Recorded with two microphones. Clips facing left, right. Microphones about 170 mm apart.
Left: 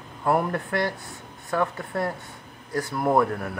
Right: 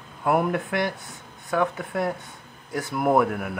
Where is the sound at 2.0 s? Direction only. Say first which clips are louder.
Right 1 dB; 20° right (ahead or behind).